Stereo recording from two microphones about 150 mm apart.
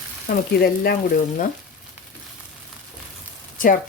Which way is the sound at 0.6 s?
90° left.